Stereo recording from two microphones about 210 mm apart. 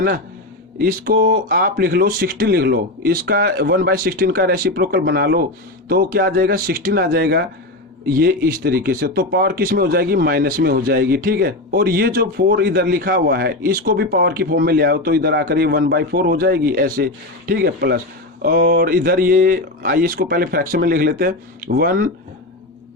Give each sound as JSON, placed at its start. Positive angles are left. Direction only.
{"t": 0.8, "sound": "speech", "side_deg": -45}